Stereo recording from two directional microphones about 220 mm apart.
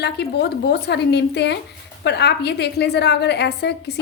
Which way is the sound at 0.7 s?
50° left (ahead or behind).